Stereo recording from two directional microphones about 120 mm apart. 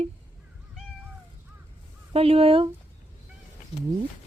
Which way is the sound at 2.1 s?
55° right (ahead or behind).